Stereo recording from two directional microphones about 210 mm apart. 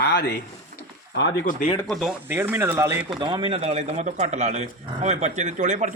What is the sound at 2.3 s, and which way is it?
Speech, 10° right (ahead or behind).